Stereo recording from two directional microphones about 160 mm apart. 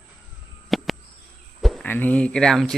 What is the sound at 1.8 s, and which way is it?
Speech, 10° left (ahead or behind).